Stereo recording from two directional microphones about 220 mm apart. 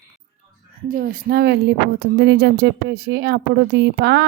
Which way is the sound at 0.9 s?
40° right (ahead or behind).